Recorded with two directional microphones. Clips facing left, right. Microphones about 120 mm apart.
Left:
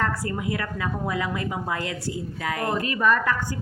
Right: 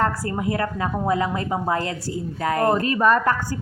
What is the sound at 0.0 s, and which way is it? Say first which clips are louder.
A woman's voice: right 4 dB; 35° right (ahead or behind).